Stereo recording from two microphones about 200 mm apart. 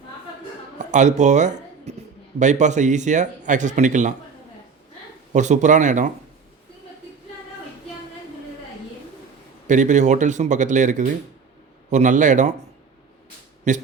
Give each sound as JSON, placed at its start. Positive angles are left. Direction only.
{"t": 0.8, "sound": "speech", "side_deg": -40}
{"t": 5.3, "sound": "speech", "side_deg": -35}
{"t": 9.6, "sound": "speech", "side_deg": -40}
{"t": 13.7, "sound": "speech", "side_deg": -35}